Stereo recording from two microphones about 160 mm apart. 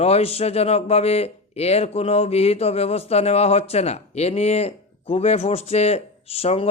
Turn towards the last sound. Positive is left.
turn(degrees=40)  # may be behind; listen again after turning